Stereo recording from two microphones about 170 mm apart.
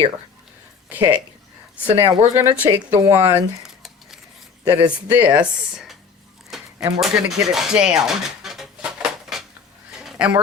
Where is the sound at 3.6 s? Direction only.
Centre (ahead or behind).